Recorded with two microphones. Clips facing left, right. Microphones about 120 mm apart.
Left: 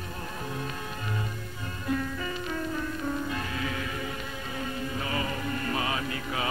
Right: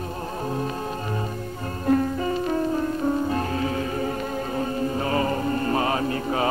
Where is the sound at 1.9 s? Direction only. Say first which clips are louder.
Right 10 dB; 40° right (ahead or behind).